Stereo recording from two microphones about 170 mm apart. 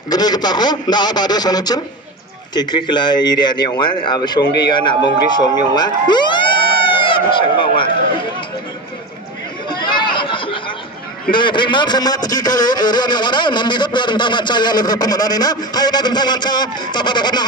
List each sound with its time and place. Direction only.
0.1 s a man's voice: 25° left (ahead or behind)
9.7 s chatter: 25° left (ahead or behind)
11.3 s a man's voice: 30° left (ahead or behind)